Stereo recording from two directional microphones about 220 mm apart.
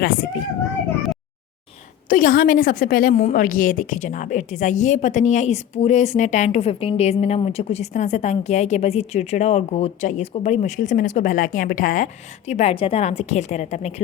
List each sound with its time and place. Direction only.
0.0 s a woman's voice: 40° left (ahead or behind)
2.0 s a woman's voice: 40° left (ahead or behind)